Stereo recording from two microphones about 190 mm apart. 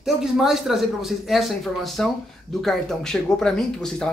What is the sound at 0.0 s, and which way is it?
Speech, centre (ahead or behind).